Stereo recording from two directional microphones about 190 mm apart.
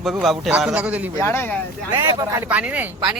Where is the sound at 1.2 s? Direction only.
10° left (ahead or behind).